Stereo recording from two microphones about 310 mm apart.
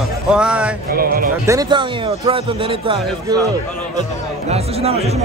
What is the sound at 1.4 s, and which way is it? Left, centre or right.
A man's voice, centre.